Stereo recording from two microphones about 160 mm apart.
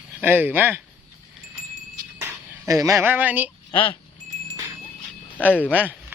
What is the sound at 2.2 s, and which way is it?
Speech, 20° right (ahead or behind).